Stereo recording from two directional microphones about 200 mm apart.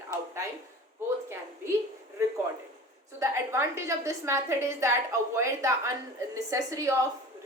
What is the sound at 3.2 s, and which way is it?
A woman's voice, 15° right (ahead or behind).